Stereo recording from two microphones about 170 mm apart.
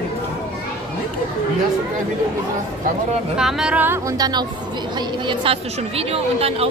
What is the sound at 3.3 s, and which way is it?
A woman's voice, 5° right (ahead or behind).